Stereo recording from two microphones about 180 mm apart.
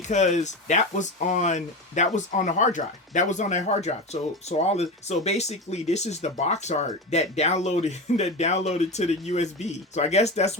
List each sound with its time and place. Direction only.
0.1 s speech: 40° left (ahead or behind)